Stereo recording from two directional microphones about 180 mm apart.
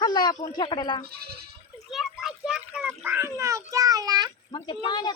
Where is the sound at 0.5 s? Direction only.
25° left (ahead or behind).